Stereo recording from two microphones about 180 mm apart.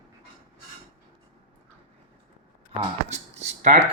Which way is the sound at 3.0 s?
40° right (ahead or behind).